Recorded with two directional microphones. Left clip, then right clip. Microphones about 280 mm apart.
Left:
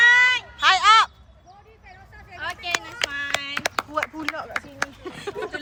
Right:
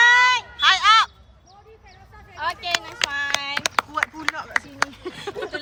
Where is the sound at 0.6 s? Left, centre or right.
Centre.